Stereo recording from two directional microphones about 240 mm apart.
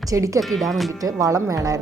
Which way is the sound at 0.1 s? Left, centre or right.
Centre.